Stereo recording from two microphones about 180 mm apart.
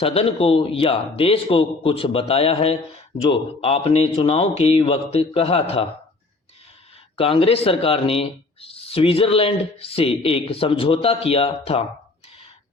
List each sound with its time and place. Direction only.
0.0 s speech: 35° left (ahead or behind)
7.2 s speech: 30° left (ahead or behind)